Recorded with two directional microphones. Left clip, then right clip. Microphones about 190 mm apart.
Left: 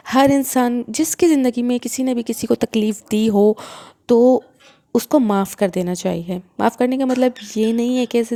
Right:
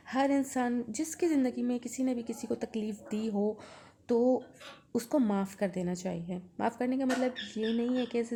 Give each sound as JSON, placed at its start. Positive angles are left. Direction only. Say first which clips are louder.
{"t": 0.1, "sound": "speech", "louder": "left 15 dB", "side_deg": 45}